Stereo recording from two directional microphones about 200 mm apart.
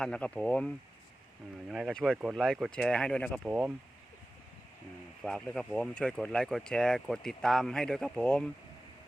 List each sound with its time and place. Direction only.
0.0 s speech: 5° left (ahead or behind)
5.2 s speech: 5° left (ahead or behind)